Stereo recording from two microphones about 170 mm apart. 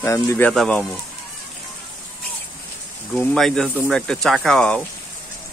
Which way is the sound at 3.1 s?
5° left (ahead or behind).